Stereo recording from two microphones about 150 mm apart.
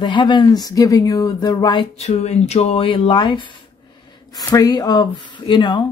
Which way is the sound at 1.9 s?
50° left (ahead or behind).